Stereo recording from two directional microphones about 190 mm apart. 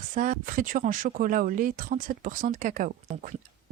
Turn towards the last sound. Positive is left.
turn(degrees=-45)  # may be behind; listen again after turning